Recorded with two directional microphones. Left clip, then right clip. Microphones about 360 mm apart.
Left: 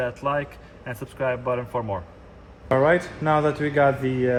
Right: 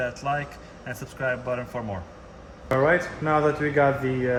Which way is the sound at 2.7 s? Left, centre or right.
Left.